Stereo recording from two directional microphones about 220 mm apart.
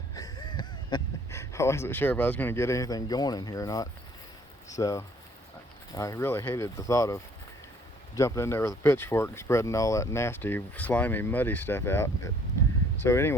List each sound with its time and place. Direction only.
0.1 s speech: 15° left (ahead or behind)